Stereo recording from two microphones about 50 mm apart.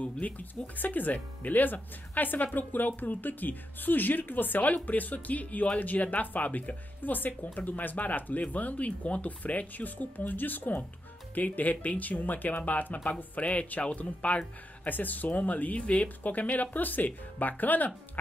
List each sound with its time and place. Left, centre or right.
0.0 s speech: left